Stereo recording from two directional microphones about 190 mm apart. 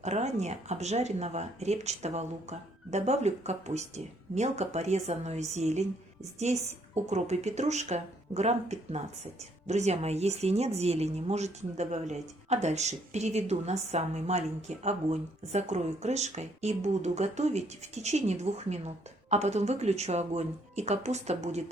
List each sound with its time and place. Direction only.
0.0 s a woman's voice: 35° right (ahead or behind)